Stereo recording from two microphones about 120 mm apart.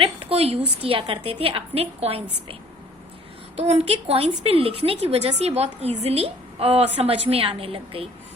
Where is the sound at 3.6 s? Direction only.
60° right (ahead or behind).